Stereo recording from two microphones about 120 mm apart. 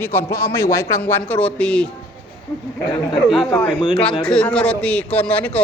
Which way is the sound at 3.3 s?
5° left (ahead or behind).